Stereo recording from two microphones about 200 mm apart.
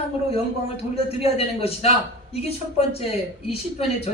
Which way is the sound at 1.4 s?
30° left (ahead or behind).